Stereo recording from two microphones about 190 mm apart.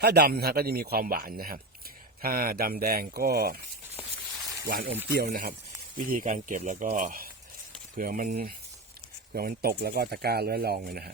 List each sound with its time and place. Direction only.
0.0 s speech: 60° right (ahead or behind)
4.4 s a sound: centre (ahead or behind)
4.6 s speech: 45° right (ahead or behind)